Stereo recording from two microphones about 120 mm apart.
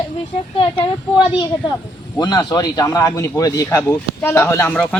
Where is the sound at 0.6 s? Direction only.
45° left (ahead or behind).